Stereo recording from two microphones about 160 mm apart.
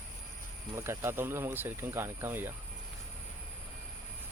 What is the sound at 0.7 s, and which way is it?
Speech, 15° right (ahead or behind).